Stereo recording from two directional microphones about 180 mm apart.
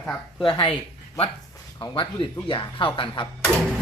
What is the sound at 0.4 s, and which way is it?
Speech, 25° left (ahead or behind).